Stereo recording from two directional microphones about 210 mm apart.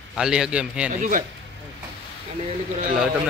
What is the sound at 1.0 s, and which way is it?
Speech, 40° right (ahead or behind).